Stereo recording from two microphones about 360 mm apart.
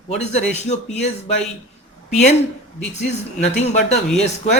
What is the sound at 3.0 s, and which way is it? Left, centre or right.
Speech, centre.